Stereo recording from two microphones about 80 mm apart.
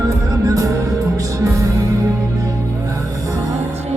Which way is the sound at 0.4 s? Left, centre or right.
Right.